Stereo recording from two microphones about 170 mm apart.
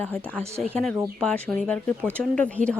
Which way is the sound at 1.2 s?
5° left (ahead or behind).